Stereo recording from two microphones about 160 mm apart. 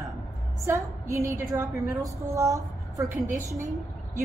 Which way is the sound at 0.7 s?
20° right (ahead or behind).